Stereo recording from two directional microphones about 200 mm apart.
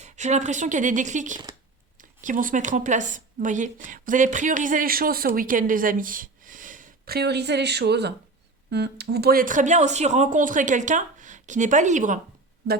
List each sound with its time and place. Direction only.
0.0 s a woman's voice: 35° right (ahead or behind)